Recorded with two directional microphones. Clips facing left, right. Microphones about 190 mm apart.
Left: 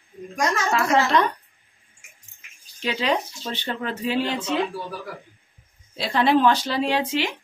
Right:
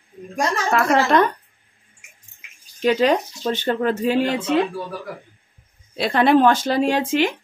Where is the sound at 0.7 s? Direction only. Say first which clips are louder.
Right 4 dB; 55° right (ahead or behind).